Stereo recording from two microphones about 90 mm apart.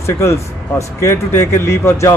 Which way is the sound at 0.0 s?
30° left (ahead or behind).